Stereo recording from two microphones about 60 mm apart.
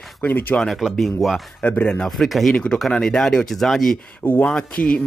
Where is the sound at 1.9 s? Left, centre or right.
Centre.